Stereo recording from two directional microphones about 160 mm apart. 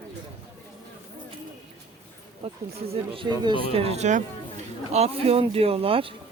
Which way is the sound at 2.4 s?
35° right (ahead or behind).